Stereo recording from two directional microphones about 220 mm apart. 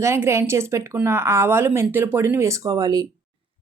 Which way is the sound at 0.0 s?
10° right (ahead or behind).